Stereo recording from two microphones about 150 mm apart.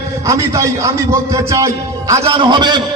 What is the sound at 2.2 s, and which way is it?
Speech, 35° right (ahead or behind).